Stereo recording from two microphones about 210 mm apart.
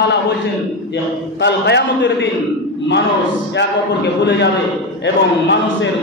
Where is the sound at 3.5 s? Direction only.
55° left (ahead or behind).